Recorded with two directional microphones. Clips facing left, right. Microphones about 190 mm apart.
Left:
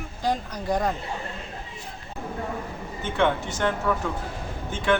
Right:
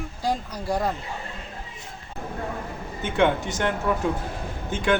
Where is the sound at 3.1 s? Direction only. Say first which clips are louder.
Right 2 dB; 15° right (ahead or behind).